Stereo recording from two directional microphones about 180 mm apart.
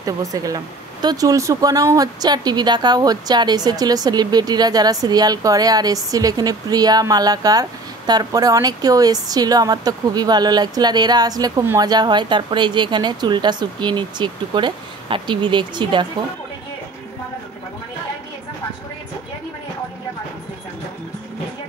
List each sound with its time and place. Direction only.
0.0 s a woman's voice: 20° right (ahead or behind)